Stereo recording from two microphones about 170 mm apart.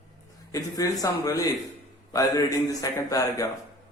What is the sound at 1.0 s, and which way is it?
Speech, 20° left (ahead or behind).